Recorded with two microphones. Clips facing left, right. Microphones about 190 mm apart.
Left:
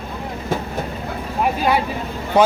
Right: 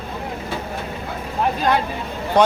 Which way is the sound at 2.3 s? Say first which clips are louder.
Left 1 dB; 5° left (ahead or behind).